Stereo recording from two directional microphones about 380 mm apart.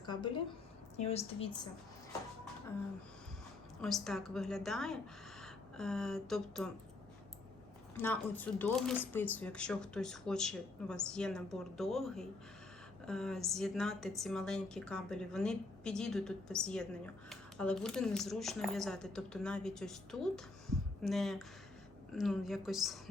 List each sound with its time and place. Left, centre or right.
0.0 s a sound: centre
0.9 s a woman's voice: centre
3.8 s speech: centre
7.9 s speech: centre